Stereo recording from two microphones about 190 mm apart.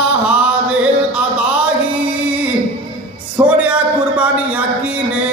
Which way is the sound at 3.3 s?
10° right (ahead or behind).